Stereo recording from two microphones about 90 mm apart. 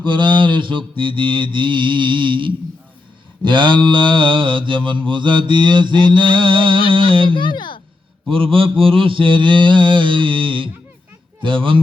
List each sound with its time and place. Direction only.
0.0 s mantra: 60° right (ahead or behind)
7.3 s speech: 55° left (ahead or behind)
8.3 s mantra: 80° right
11.3 s speech: 65° right (ahead or behind)